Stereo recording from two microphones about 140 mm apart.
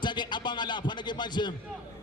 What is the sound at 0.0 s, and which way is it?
Speech, 30° left (ahead or behind).